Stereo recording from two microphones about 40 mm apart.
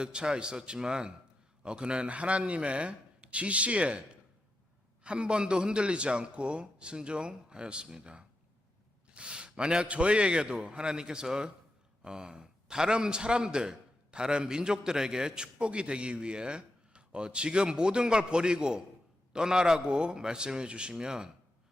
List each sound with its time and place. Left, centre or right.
0.0 s a man's voice: right
5.0 s a man's voice: right